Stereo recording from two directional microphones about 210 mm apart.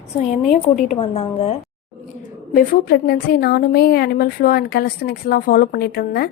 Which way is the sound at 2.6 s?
50° left (ahead or behind).